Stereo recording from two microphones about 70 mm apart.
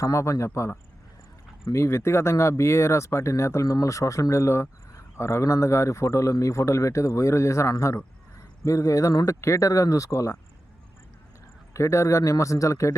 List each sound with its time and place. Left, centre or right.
0.0 s speech: left
11.7 s speech: left